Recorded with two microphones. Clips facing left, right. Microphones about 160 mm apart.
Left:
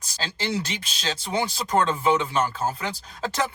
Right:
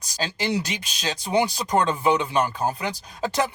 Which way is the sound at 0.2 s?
15° right (ahead or behind).